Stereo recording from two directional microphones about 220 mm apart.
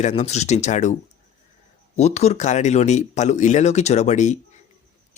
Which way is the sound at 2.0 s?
30° left (ahead or behind).